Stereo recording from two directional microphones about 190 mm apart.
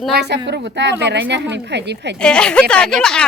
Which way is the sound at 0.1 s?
60° right (ahead or behind).